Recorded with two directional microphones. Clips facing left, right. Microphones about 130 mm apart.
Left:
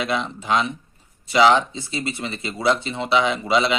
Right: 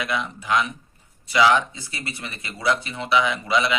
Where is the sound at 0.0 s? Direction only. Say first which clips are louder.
Left 3 dB; 25° left (ahead or behind).